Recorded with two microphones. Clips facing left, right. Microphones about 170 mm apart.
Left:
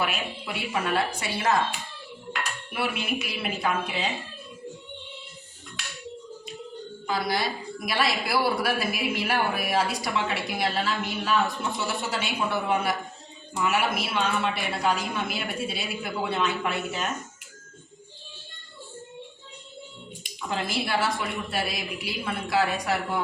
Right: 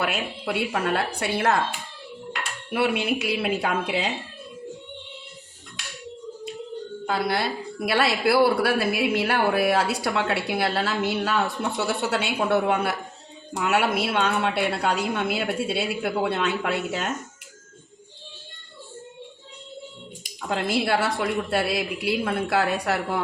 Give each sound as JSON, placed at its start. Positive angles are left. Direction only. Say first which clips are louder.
{"t": 0.0, "sound": "a woman's voice", "louder": "right 3 dB", "side_deg": -65}
{"t": 2.7, "sound": "a woman's voice", "louder": "right 6 dB", "side_deg": -70}
{"t": 7.1, "sound": "a woman's voice", "louder": "right 2 dB", "side_deg": -60}
{"t": 20.5, "sound": "a woman's voice", "louder": "right 5 dB", "side_deg": -60}